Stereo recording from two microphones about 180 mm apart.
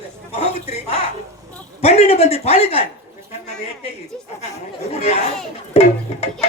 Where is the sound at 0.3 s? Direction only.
35° left (ahead or behind).